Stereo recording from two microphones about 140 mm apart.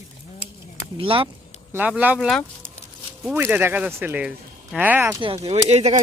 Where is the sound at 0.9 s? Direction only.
40° right (ahead or behind).